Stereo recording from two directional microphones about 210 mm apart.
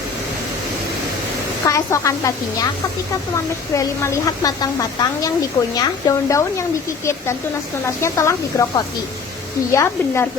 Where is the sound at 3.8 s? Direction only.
15° left (ahead or behind).